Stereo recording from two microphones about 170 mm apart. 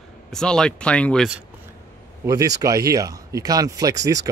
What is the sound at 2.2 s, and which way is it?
Speech, 20° right (ahead or behind).